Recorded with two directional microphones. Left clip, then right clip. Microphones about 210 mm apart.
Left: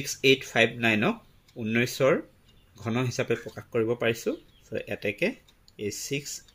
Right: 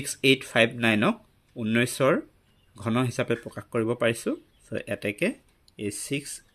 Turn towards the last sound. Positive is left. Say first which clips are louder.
# even
turn(degrees=-50)  # may be behind; listen again after turning